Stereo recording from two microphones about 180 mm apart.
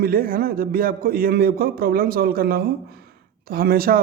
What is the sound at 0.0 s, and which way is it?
A man's voice, 55° right (ahead or behind).